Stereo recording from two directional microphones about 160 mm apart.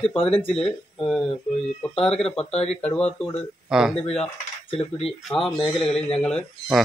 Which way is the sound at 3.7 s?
5° right (ahead or behind).